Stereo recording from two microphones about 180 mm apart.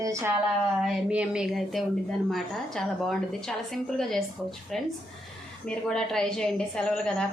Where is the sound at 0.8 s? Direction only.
5° right (ahead or behind).